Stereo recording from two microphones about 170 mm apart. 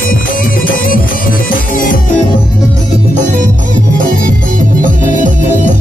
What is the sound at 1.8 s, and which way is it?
Music, 55° left (ahead or behind).